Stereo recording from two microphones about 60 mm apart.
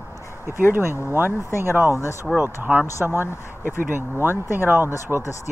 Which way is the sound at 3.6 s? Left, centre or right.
Right.